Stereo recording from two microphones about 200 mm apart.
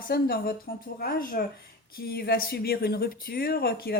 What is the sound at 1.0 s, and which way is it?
A woman's voice, 45° left (ahead or behind).